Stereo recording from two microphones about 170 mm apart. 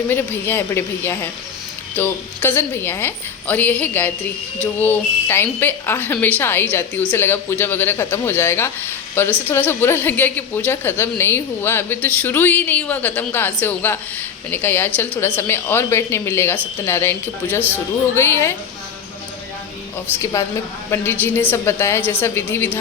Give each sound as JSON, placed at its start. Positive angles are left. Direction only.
{"t": 0.1, "sound": "a woman's voice", "side_deg": 15}
{"t": 20.4, "sound": "a woman's voice", "side_deg": 20}